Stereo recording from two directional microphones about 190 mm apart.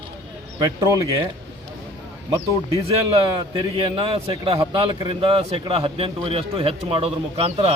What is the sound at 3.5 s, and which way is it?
A man's voice, 25° right (ahead or behind).